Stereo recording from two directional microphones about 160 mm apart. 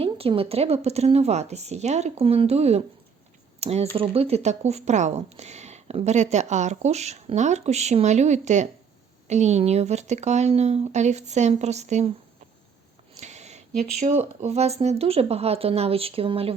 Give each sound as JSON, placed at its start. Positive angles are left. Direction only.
{"t": 0.0, "sound": "a woman's voice", "side_deg": -35}
{"t": 13.1, "sound": "a sound", "side_deg": -45}
{"t": 14.1, "sound": "a woman's voice", "side_deg": -45}